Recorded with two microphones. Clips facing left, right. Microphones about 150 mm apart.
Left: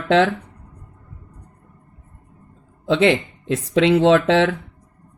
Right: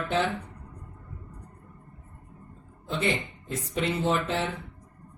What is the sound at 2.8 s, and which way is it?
Speech, 90° left.